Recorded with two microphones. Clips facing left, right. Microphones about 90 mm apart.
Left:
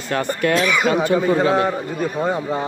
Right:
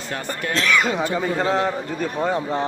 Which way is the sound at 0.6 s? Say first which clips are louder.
Right 1 dB; 10° left (ahead or behind).